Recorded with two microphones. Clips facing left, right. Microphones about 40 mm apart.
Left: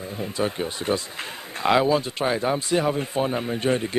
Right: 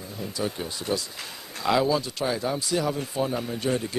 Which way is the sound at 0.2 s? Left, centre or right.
Left.